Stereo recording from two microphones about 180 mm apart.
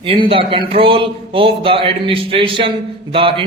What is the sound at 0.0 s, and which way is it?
A man's voice, 30° right (ahead or behind).